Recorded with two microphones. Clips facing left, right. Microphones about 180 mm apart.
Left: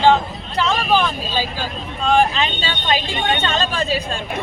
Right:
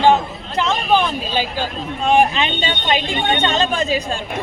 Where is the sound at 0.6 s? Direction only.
20° right (ahead or behind).